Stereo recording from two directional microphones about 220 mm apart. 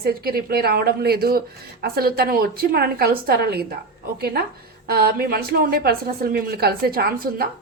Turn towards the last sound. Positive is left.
turn(degrees=-45)  # may be behind; listen again after turning